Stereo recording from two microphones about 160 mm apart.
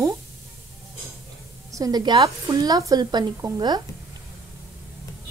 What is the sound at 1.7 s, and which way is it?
A woman's voice, 20° right (ahead or behind).